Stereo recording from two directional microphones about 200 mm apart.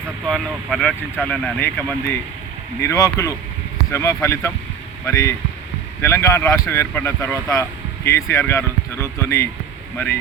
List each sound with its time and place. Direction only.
0.3 s speech: 5° left (ahead or behind)